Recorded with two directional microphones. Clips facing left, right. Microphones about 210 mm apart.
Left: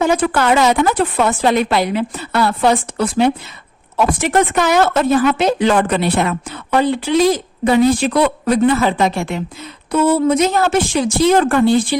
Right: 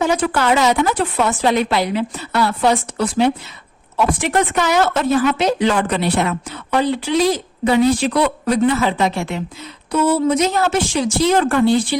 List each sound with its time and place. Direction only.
0.0 s speech: 50° left (ahead or behind)